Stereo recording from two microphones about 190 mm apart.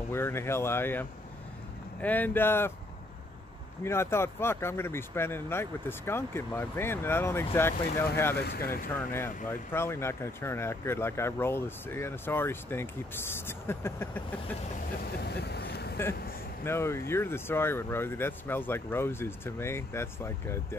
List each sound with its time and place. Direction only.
0.1 s speech: 15° left (ahead or behind)
3.8 s speech: 15° left (ahead or behind)
8.4 s speech: 55° left (ahead or behind)
8.9 s speech: 10° left (ahead or behind)
15.2 s vehicle: 60° left (ahead or behind)
16.6 s speech: 15° left (ahead or behind)